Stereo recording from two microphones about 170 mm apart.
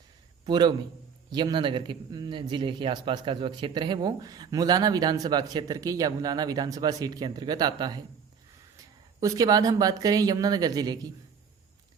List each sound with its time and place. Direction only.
0.4 s a man's voice: 25° right (ahead or behind)
9.2 s speech: 20° right (ahead or behind)